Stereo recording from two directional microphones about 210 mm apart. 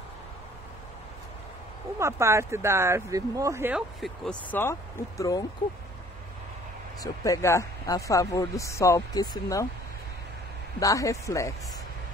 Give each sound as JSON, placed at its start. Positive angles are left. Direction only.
{"t": 2.0, "sound": "speech", "side_deg": -15}
{"t": 7.0, "sound": "speech", "side_deg": 15}
{"t": 10.8, "sound": "speech", "side_deg": 15}